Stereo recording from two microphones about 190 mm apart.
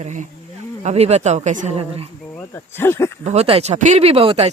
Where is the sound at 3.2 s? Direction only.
35° right (ahead or behind).